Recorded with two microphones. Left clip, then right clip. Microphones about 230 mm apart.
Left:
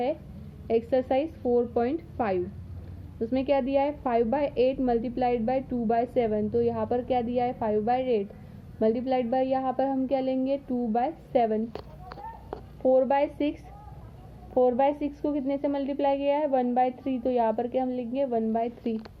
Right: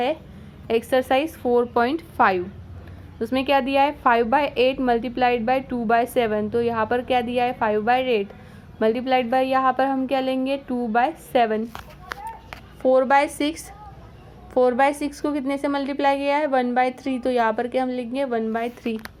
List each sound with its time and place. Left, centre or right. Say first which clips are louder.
0.7 s a woman's voice: right 5 dB; centre
12.9 s a woman's voice: right 5 dB; centre
14.6 s a woman's voice: right 5 dB; centre